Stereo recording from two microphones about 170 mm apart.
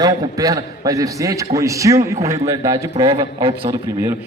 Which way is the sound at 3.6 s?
15° right (ahead or behind).